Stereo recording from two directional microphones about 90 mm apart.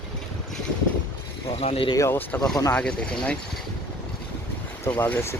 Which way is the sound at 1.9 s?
35° left (ahead or behind).